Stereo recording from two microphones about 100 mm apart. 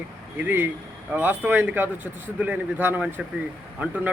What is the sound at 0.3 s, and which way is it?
Speech, 20° right (ahead or behind).